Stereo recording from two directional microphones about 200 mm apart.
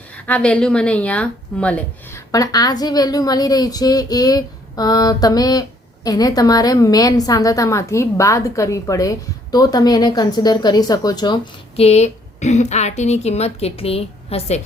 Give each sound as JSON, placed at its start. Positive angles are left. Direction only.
{"t": 0.3, "sound": "speech", "side_deg": 5}
{"t": 2.3, "sound": "a woman's voice", "side_deg": 20}
{"t": 11.8, "sound": "speech", "side_deg": 35}